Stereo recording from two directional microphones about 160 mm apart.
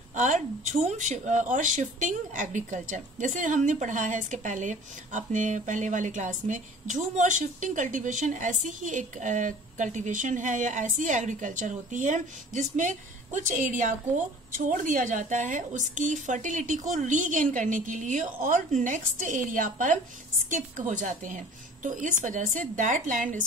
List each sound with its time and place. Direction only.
0.1 s speech: 50° right (ahead or behind)